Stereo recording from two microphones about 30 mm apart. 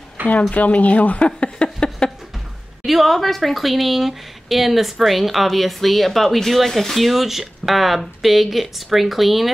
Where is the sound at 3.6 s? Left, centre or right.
Centre.